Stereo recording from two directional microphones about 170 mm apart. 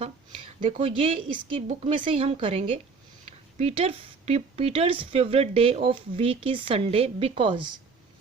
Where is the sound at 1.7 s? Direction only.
50° right (ahead or behind).